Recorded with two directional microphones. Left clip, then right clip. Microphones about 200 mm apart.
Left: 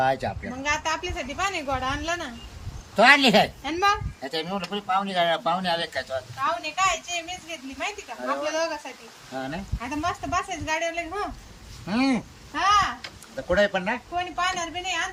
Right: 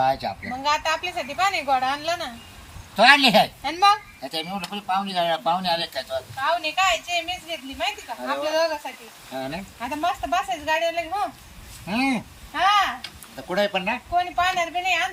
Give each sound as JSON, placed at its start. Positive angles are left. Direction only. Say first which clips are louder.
{"t": 0.0, "sound": "speech", "louder": "right 2 dB", "side_deg": 15}
{"t": 0.6, "sound": "speech", "louder": "right 3 dB", "side_deg": -5}
{"t": 2.9, "sound": "speech", "louder": "right 2 dB", "side_deg": 20}
{"t": 3.6, "sound": "a woman's voice", "louder": "right 4 dB", "side_deg": -5}
{"t": 4.2, "sound": "speech", "louder": "even", "side_deg": 15}
{"t": 6.4, "sound": "speech", "louder": "right 3 dB", "side_deg": -5}
{"t": 13.3, "sound": "speech", "louder": "left 1 dB", "side_deg": 10}
{"t": 14.3, "sound": "speech", "louder": "right 5 dB", "side_deg": -5}